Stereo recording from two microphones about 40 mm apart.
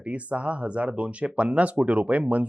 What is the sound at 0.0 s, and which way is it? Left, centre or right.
Speech, right.